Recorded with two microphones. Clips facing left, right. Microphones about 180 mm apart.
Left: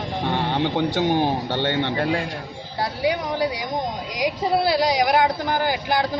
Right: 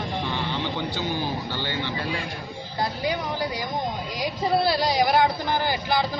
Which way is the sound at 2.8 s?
75° left (ahead or behind).